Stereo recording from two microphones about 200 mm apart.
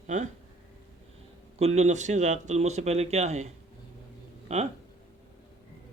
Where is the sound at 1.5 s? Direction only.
30° right (ahead or behind).